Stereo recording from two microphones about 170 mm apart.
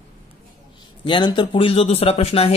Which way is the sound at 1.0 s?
25° left (ahead or behind).